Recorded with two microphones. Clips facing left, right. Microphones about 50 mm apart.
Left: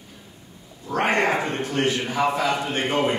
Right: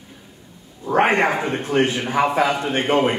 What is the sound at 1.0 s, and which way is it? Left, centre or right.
A man's voice, centre.